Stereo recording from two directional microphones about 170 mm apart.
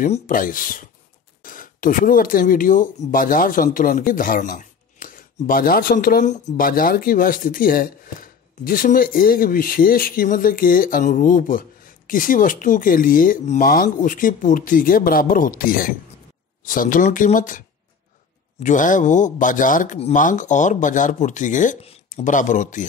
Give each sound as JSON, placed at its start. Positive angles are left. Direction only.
{"t": 0.0, "sound": "speech", "side_deg": 50}